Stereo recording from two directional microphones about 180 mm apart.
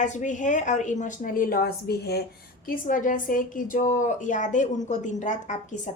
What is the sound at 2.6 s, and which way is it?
A woman's voice, 50° left (ahead or behind).